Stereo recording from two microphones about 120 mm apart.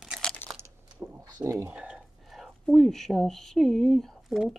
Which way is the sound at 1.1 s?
25° right (ahead or behind).